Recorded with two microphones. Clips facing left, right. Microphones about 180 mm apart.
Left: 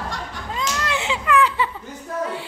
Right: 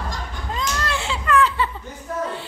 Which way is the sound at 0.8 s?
15° left (ahead or behind).